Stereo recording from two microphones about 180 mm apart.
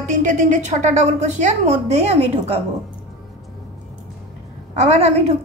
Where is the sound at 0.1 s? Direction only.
40° right (ahead or behind).